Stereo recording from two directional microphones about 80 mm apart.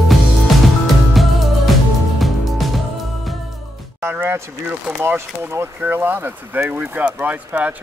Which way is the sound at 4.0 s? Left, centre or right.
Right.